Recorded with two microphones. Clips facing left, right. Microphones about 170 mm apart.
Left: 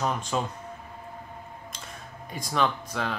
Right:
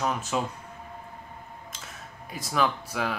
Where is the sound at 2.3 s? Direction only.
5° right (ahead or behind).